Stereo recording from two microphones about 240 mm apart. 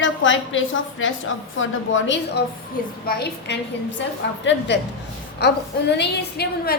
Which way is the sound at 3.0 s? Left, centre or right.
Left.